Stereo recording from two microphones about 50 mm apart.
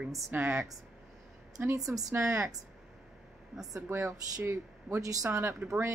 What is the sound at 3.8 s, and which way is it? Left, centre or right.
Speech, right.